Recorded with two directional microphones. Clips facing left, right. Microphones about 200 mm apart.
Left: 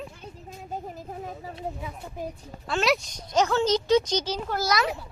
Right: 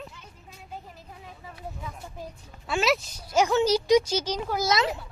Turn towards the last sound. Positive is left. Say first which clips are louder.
# right 1 dB
turn(degrees=-25)  # may be behind; listen again after turning